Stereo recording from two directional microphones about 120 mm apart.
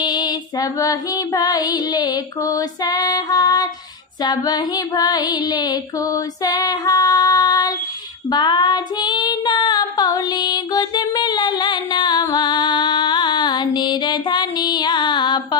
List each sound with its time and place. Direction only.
0.0 s female singing: 35° left (ahead or behind)
8.3 s child singing: 40° left (ahead or behind)